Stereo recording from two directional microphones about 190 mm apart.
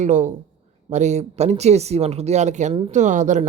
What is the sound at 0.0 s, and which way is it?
Speech, 40° right (ahead or behind).